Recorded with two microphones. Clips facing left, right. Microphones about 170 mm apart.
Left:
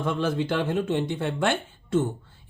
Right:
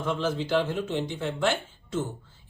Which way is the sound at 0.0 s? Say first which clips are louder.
Left 2 dB; 55° left (ahead or behind).